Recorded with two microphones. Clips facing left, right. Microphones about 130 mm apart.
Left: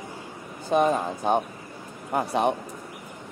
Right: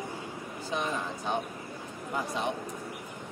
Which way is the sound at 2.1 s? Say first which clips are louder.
Left 9 dB; 60° left (ahead or behind).